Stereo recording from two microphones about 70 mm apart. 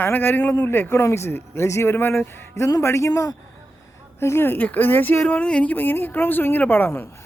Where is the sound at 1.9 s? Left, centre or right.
Left.